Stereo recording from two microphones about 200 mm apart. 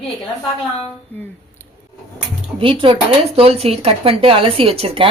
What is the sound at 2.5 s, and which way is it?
Speech, 25° right (ahead or behind).